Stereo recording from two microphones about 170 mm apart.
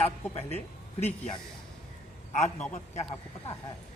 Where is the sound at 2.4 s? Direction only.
10° left (ahead or behind).